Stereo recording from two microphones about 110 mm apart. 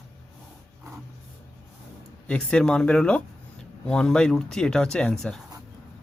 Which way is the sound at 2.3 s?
10° left (ahead or behind).